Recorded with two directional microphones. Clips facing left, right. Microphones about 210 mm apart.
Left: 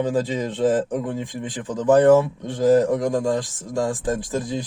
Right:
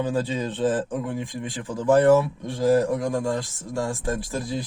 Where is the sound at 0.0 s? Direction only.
15° left (ahead or behind).